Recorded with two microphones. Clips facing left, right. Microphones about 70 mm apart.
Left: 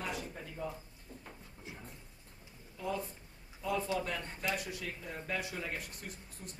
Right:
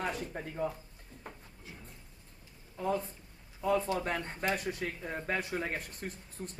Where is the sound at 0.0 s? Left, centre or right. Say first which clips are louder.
Right 4 dB; right.